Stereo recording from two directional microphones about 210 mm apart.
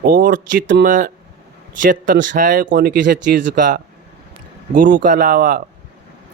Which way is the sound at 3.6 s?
40° right (ahead or behind).